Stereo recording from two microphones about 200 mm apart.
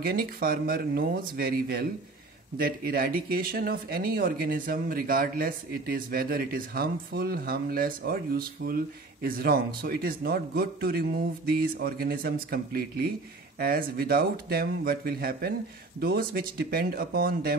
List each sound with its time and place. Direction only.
0.0 s speech: 50° right (ahead or behind)